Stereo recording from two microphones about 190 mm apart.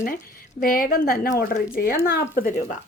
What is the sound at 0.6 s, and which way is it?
Speech, 50° left (ahead or behind).